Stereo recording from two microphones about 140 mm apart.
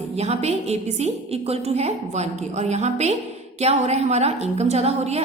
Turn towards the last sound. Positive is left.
turn(degrees=-50)  # may be behind; listen again after turning